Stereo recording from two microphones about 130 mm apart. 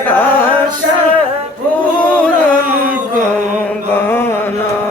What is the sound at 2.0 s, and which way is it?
Music, 10° left (ahead or behind).